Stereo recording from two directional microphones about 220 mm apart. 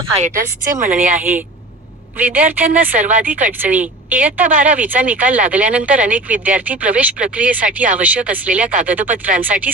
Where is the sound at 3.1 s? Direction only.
35° right (ahead or behind).